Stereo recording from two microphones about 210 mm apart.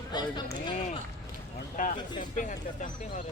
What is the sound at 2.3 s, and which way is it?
Speech, 40° left (ahead or behind).